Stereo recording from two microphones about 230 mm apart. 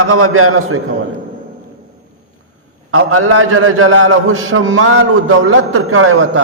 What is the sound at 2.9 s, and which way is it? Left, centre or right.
A man's voice, right.